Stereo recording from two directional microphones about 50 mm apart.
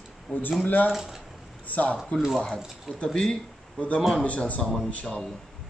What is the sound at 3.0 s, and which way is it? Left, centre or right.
Speech, centre.